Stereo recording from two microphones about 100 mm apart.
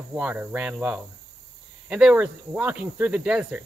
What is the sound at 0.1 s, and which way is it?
Speech, 15° right (ahead or behind).